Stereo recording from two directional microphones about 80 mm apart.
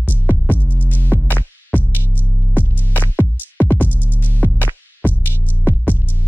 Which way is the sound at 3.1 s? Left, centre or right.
Left.